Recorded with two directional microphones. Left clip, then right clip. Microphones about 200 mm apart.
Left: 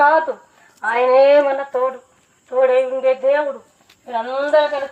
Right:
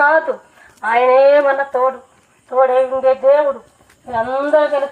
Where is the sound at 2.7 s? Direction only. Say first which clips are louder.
Right 2 dB; 35° left (ahead or behind).